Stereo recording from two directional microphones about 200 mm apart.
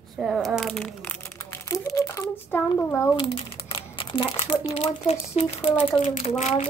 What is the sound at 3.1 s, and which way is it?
Speech, 25° left (ahead or behind).